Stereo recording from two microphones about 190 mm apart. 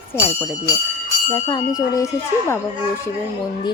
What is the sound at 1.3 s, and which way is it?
Speech, 20° left (ahead or behind).